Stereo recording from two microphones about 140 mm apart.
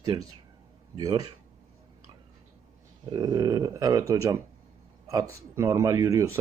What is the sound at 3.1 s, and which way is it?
Speech, 30° right (ahead or behind).